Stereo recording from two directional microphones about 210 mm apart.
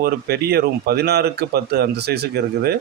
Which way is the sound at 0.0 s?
50° right (ahead or behind).